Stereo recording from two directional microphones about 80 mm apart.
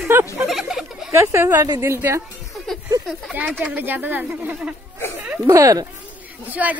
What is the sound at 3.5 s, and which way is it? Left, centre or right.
Speech, centre.